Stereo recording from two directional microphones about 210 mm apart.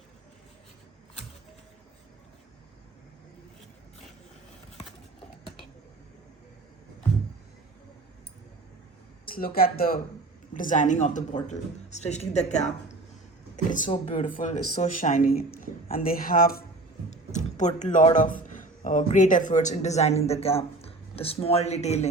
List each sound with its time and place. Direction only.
9.2 s speech: 45° left (ahead or behind)